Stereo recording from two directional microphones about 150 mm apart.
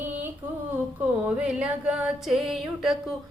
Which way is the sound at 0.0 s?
15° right (ahead or behind).